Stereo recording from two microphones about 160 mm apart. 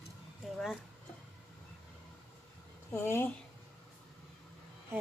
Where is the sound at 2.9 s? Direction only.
15° left (ahead or behind).